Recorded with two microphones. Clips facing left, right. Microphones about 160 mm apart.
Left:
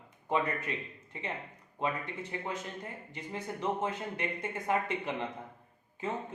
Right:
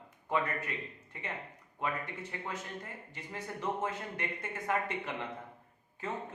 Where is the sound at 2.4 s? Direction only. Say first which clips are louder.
Left 3 dB; 20° left (ahead or behind).